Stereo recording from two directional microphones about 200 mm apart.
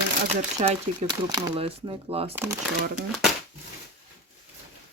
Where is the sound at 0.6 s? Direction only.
30° right (ahead or behind).